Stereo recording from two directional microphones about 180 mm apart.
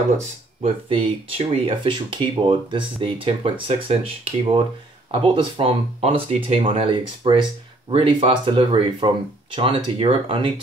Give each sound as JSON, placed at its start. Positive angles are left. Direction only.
{"t": 0.8, "sound": "speech", "side_deg": -30}